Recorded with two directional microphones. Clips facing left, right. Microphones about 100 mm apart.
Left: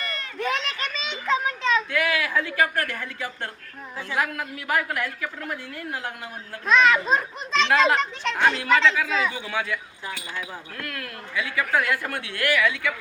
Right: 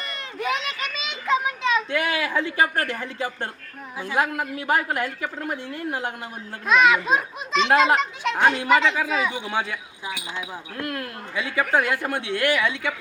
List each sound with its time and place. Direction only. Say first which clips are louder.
0.0 s children playing: left 2 dB; 20° right (ahead or behind)
0.3 s children playing: right 1 dB; 5° right (ahead or behind)
1.9 s speech: even; 25° right (ahead or behind)
6.7 s a child's voice: right 1 dB; 10° right (ahead or behind); by 12.9 s 25° right (ahead or behind)